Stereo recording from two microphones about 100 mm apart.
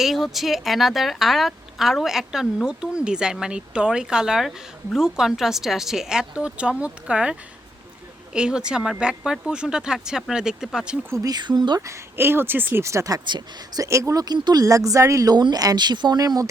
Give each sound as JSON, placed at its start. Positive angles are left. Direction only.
{"t": 0.0, "sound": "speech", "side_deg": 0}
{"t": 11.2, "sound": "speech", "side_deg": -45}
{"t": 11.9, "sound": "speech", "side_deg": -25}
{"t": 13.2, "sound": "speech", "side_deg": -50}
{"t": 13.8, "sound": "speech", "side_deg": -30}